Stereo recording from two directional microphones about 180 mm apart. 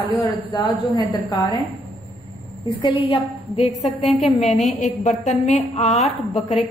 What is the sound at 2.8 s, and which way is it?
A woman's voice, 30° left (ahead or behind).